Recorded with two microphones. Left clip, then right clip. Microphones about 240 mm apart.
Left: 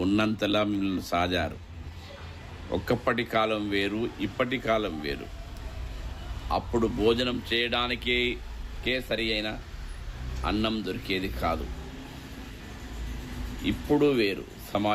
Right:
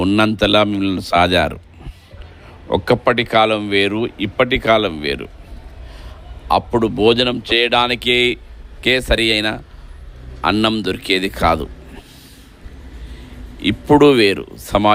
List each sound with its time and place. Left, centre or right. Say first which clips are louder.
0.0 s speech: right 11 dB; right
2.7 s speech: right 12 dB; right
6.5 s speech: right 12 dB; right
13.7 s speech: right 13 dB; right